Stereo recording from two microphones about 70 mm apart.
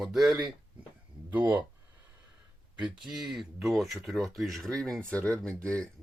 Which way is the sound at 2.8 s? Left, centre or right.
Centre.